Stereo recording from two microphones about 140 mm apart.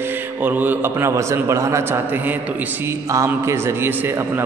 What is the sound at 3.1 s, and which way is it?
A man's voice, 20° right (ahead or behind).